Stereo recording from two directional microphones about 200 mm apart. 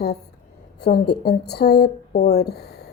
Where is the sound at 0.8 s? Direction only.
55° left (ahead or behind).